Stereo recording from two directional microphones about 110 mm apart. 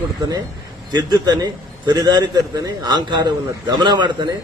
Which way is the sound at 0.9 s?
40° right (ahead or behind).